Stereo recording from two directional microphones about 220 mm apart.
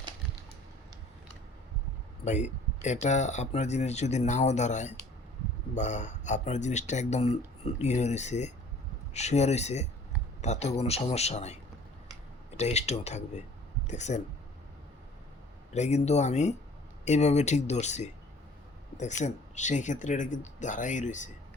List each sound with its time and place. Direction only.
2.2 s speech: 30° left (ahead or behind)
15.7 s speech: 30° left (ahead or behind)